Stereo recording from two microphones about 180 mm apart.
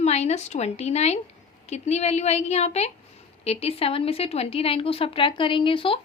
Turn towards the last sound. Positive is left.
turn(degrees=30)  # may be behind; listen again after turning